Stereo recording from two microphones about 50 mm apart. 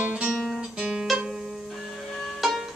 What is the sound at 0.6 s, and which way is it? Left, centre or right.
Guitar, centre.